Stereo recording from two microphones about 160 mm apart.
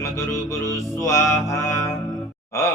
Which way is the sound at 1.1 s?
15° left (ahead or behind).